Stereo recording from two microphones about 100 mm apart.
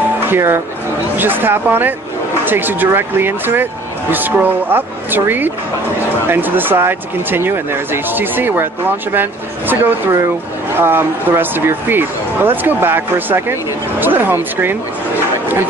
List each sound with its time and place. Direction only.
0.3 s speech: 25° right (ahead or behind)